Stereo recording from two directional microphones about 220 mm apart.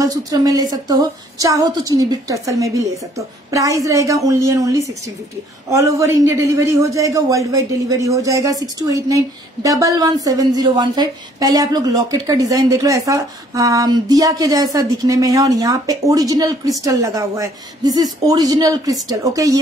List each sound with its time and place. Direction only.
0.0 s a woman's voice: 15° right (ahead or behind)